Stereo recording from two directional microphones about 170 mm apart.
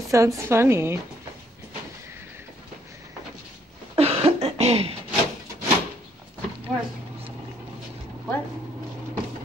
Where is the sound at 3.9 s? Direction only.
35° right (ahead or behind).